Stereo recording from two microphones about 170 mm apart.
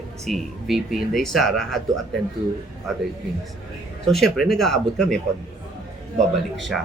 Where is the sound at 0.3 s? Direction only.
Centre (ahead or behind).